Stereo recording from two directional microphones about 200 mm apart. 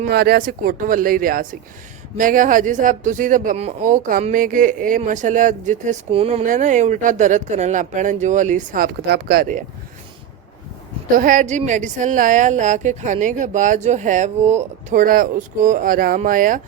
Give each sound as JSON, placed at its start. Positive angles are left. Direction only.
{"t": 0.0, "sound": "speech", "side_deg": -50}
{"t": 11.2, "sound": "speech", "side_deg": -40}